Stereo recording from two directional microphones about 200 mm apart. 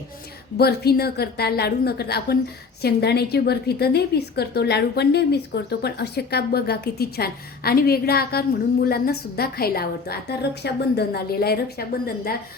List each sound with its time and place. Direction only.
0.5 s a woman's voice: 50° left (ahead or behind)